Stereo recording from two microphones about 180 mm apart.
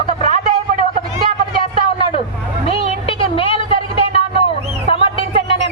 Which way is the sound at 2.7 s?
30° left (ahead or behind).